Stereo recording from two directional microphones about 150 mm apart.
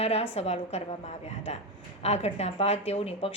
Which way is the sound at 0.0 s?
45° left (ahead or behind).